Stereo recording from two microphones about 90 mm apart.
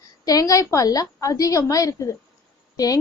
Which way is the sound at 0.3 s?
40° left (ahead or behind).